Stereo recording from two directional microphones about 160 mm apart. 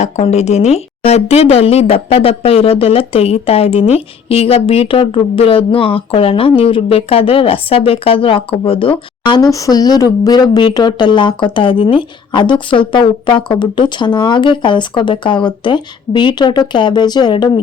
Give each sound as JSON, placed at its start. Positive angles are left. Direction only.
{"t": 0.0, "sound": "speech", "side_deg": 45}